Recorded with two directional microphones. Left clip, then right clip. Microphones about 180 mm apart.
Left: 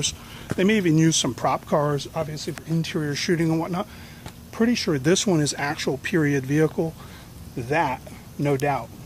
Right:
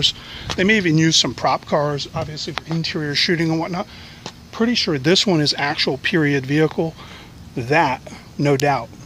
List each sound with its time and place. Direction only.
0.6 s speech: centre (ahead or behind); by 6.9 s 20° right (ahead or behind)
7.5 s speech: 45° right (ahead or behind)